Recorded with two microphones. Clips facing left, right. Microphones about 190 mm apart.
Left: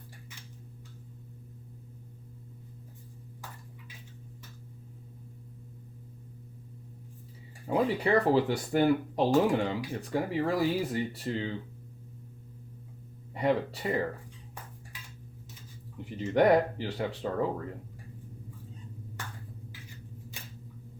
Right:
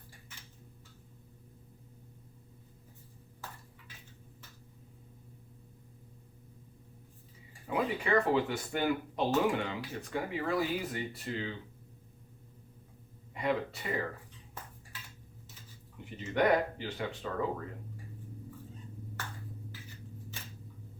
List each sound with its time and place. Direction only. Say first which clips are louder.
7.7 s speech: left 4 dB; 35° left (ahead or behind)
13.3 s a sound: left 5 dB; 35° left (ahead or behind)
16.2 s speech: left 5 dB; 35° left (ahead or behind)